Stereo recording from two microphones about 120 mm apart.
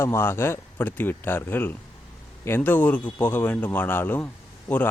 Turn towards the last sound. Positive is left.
turn(degrees=15)  # may be behind; listen again after turning